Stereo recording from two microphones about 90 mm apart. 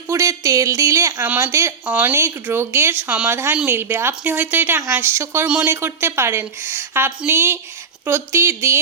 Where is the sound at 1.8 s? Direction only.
15° right (ahead or behind).